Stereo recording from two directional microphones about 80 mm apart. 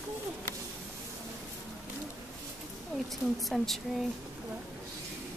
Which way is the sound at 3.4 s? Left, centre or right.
Centre.